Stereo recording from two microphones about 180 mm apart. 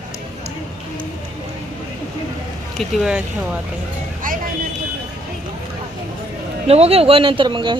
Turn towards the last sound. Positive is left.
turn(degrees=-25)  # may be behind; listen again after turning